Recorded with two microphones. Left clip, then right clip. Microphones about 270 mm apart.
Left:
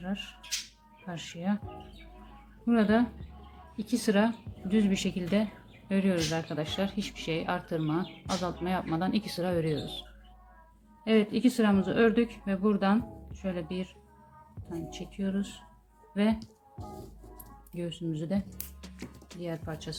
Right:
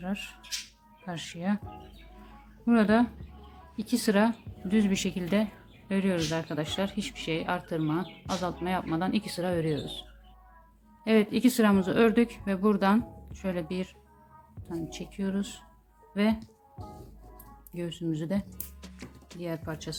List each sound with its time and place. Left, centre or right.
0.0 s speech: centre
2.6 s speech: centre
11.0 s speech: centre
17.7 s speech: centre
18.5 s music: centre
19.4 s speech: centre